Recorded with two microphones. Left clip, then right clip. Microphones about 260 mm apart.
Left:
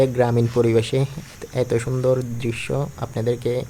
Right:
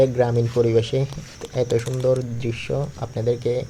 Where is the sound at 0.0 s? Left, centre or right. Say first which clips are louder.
Even; centre.